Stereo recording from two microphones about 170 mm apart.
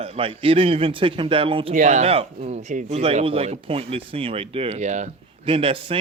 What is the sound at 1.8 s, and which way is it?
Speech, 45° right (ahead or behind).